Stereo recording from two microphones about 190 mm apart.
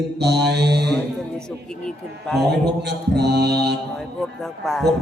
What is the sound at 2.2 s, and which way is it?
Speech, centre (ahead or behind).